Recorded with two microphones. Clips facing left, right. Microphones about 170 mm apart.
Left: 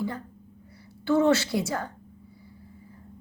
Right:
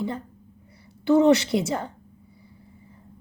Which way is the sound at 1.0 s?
20° right (ahead or behind).